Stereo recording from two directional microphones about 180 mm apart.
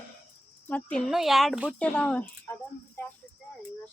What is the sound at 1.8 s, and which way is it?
Speech, 5° left (ahead or behind).